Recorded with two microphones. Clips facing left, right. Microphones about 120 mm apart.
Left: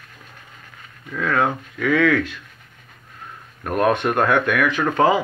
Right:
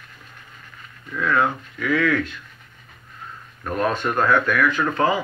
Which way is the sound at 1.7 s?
85° left.